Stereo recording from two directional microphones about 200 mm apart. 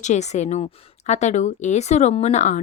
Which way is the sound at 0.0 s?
35° left (ahead or behind).